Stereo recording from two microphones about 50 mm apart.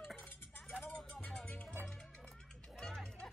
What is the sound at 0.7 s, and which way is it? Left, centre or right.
Music, left.